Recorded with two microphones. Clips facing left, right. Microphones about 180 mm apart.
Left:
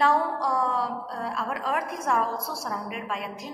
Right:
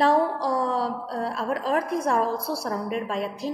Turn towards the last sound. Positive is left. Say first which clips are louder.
# right 5 dB
turn(degrees=-35)  # may be behind; listen again after turning